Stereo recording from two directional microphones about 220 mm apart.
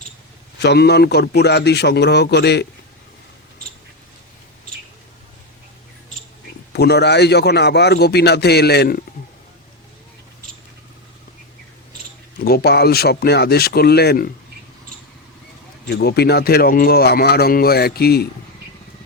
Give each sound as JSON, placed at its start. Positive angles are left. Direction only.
{"t": 0.6, "sound": "speech", "side_deg": 50}
{"t": 6.7, "sound": "speech", "side_deg": 50}
{"t": 12.4, "sound": "speech", "side_deg": 45}
{"t": 15.9, "sound": "speech", "side_deg": 45}